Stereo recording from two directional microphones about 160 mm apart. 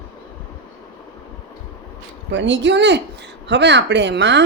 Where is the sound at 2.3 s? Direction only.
90° right.